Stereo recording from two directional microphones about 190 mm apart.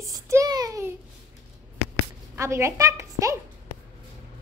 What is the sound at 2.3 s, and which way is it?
A woman's voice, 15° right (ahead or behind).